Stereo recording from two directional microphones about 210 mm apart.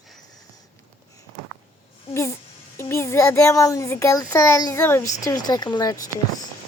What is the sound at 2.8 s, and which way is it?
A child's voice, 15° left (ahead or behind).